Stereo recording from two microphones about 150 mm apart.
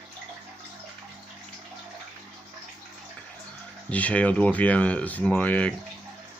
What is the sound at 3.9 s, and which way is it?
Speech, 10° left (ahead or behind).